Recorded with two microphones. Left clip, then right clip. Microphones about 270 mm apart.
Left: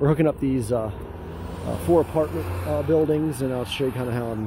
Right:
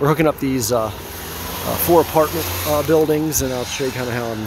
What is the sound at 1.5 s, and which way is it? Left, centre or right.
Speech, right.